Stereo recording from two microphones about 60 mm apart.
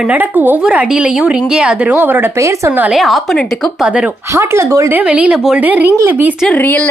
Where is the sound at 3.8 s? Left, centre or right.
Centre.